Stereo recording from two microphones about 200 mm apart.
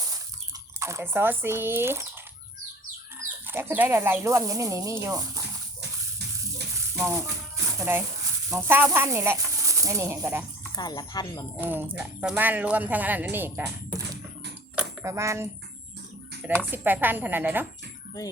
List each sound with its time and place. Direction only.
0.8 s speech: 15° right (ahead or behind)
3.2 s speech: 10° right (ahead or behind)
6.9 s a sound: 10° right (ahead or behind)
8.4 s speech: 15° right (ahead or behind)
10.8 s speech: 20° left (ahead or behind)
11.5 s speech: 10° right (ahead or behind)
14.8 s a sound: 15° right (ahead or behind)
16.6 s speech: 10° right (ahead or behind)